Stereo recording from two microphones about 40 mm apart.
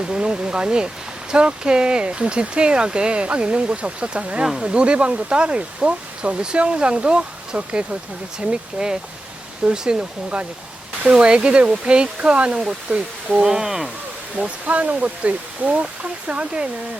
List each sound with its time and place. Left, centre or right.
0.1 s speech: right
13.4 s speech: centre
14.3 s speech: right